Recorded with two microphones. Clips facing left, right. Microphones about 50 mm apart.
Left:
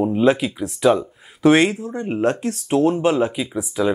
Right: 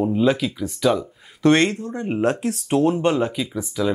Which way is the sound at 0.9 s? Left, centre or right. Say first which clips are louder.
Left 2 dB; centre.